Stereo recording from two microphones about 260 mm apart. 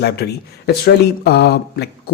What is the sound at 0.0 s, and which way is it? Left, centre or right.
Speech, left.